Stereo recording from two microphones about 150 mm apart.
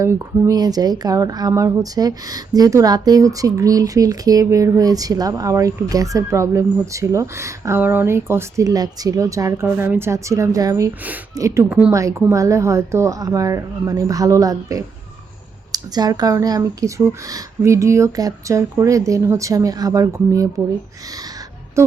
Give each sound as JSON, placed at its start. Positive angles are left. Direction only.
{"t": 0.0, "sound": "a woman's voice", "side_deg": -20}